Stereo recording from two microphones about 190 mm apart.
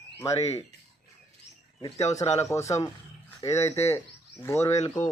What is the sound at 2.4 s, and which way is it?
Speech, 15° left (ahead or behind).